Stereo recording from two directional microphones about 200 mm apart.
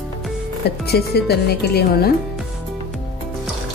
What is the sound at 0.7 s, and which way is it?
A woman's voice, 55° left (ahead or behind).